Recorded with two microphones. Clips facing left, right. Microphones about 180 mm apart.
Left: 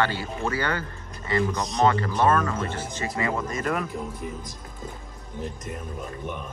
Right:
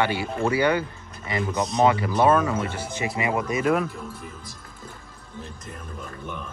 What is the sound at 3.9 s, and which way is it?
Speech, 15° left (ahead or behind).